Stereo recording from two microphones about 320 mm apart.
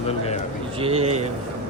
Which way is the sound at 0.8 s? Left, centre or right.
Centre.